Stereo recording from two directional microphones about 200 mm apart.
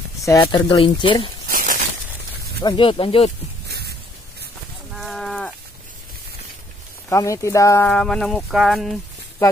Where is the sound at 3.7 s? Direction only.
55° right (ahead or behind).